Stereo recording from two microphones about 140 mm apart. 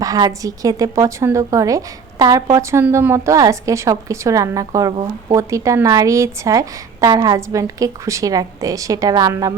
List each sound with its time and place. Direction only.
0.0 s a woman's voice: 25° right (ahead or behind)